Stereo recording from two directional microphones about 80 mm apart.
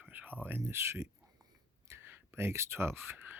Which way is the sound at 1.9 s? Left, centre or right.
Right.